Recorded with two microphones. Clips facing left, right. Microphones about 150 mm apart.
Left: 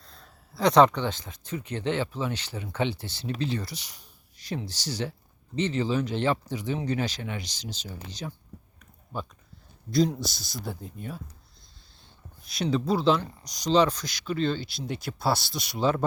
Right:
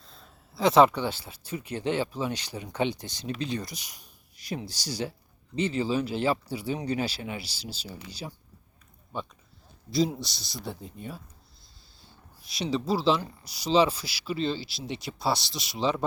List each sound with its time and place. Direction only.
0.0 s speech: centre (ahead or behind)
9.1 s speech: centre (ahead or behind)
12.4 s speech: centre (ahead or behind)